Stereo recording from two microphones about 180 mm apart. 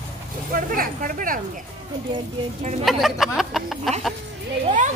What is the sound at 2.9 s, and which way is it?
Speech, centre (ahead or behind).